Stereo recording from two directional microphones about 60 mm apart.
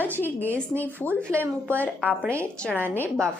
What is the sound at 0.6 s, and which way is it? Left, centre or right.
Speech, left.